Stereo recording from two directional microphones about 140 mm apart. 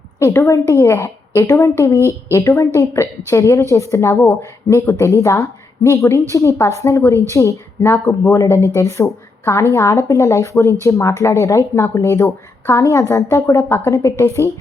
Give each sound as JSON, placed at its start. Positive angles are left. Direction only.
{"t": 0.2, "sound": "a woman's voice", "side_deg": 20}